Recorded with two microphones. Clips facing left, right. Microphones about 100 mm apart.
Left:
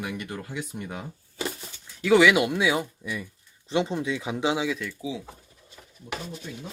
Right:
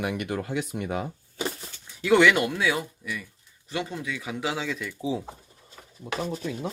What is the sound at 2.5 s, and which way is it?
Speech, 20° left (ahead or behind).